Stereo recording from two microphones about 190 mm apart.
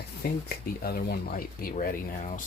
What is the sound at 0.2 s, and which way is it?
Speech, 55° left (ahead or behind).